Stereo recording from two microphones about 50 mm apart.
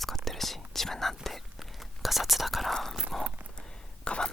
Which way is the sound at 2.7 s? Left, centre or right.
Centre.